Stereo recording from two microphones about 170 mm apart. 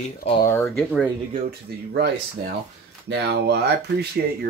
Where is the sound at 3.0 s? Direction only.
85° right.